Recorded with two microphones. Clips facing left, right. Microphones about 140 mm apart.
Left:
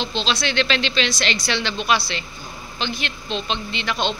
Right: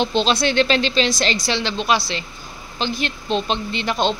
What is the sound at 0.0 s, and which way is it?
A woman's voice, 50° right (ahead or behind).